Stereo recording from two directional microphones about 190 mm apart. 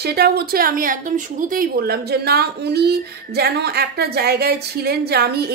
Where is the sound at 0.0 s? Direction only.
55° right (ahead or behind).